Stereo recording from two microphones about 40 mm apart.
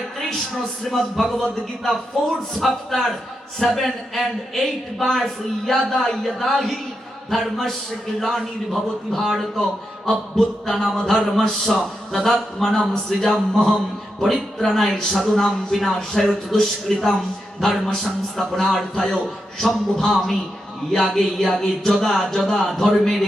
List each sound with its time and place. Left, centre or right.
0.9 s a man's voice: centre
16.5 s a man's voice: centre